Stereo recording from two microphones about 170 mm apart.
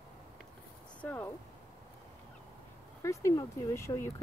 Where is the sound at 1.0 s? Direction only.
10° left (ahead or behind).